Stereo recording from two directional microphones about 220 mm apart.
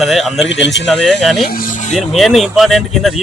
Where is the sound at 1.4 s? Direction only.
40° left (ahead or behind).